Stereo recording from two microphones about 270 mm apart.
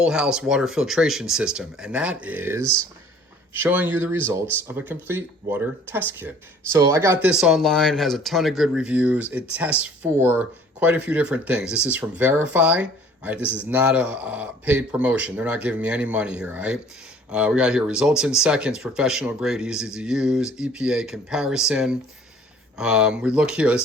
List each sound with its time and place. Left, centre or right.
0.0 s speech: centre